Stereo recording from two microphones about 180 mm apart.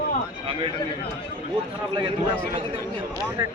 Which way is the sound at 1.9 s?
25° right (ahead or behind).